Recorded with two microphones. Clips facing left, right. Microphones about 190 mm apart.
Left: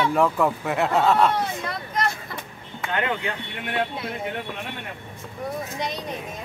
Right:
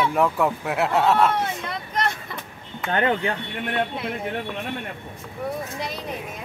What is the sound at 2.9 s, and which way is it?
Speech, 35° right (ahead or behind).